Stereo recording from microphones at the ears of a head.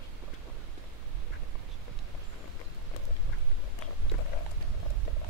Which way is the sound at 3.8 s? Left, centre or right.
Left.